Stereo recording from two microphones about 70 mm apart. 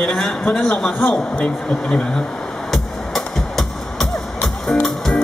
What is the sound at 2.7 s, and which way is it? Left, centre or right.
Music, centre.